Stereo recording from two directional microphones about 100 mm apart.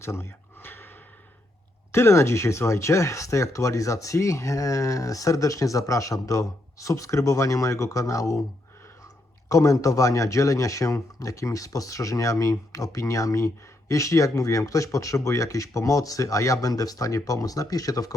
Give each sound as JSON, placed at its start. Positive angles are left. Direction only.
{"t": 0.0, "sound": "a sound", "side_deg": 25}
{"t": 1.9, "sound": "a man's voice", "side_deg": 25}
{"t": 9.5, "sound": "a man's voice", "side_deg": 30}